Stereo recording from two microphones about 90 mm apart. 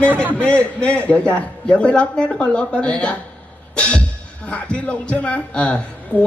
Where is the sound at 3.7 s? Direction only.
15° left (ahead or behind).